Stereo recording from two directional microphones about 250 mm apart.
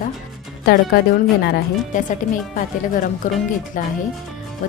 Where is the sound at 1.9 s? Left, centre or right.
Left.